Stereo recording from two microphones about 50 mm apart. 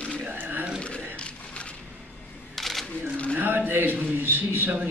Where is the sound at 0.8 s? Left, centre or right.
Left.